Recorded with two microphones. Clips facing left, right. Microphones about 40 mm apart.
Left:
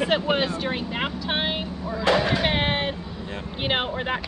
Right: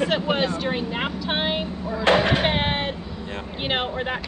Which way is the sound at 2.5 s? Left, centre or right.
Centre.